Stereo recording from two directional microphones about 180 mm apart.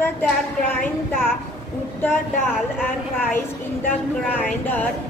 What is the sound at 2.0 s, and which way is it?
Speech, 10° left (ahead or behind).